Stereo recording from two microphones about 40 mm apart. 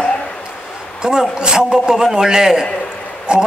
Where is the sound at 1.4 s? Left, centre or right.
Centre.